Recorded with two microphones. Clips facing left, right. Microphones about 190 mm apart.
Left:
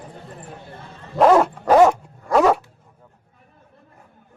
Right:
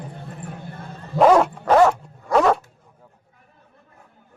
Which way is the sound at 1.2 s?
Centre (ahead or behind).